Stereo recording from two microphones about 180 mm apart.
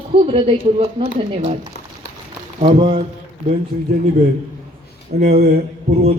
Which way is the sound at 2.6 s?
35° right (ahead or behind).